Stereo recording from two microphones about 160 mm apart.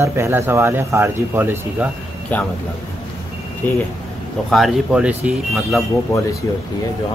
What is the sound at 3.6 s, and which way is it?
Speech, 10° left (ahead or behind).